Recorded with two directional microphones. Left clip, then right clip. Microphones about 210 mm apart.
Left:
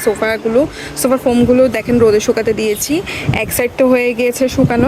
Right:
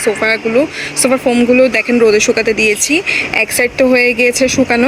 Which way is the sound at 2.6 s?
60° left (ahead or behind).